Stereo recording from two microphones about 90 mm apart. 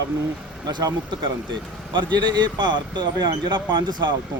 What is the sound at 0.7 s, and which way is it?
A man's voice, 45° right (ahead or behind).